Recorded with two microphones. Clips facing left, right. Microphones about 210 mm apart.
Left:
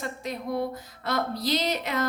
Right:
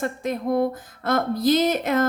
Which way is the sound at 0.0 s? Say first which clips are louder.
Right 7 dB; 50° right (ahead or behind).